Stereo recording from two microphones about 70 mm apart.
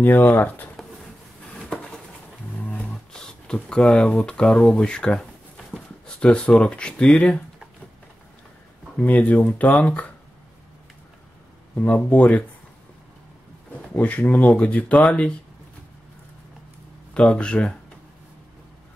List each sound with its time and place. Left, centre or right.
0.0 s speech: left
2.9 s speech: centre
8.9 s speech: left
11.7 s speech: left
13.9 s speech: left
17.1 s speech: centre